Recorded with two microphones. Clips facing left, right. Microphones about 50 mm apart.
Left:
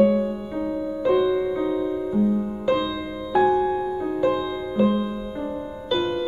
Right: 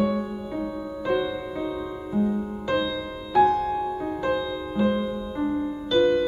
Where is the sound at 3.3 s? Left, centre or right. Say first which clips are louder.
Left 1 dB; centre.